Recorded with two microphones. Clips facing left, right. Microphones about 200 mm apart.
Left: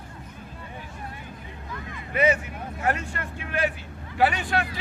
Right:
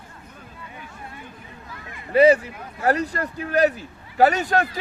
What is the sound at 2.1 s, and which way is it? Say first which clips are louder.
Speech: right 8 dB; 35° right (ahead or behind).